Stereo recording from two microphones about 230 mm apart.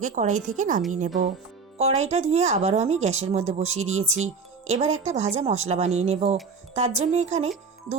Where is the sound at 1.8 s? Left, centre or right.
Right.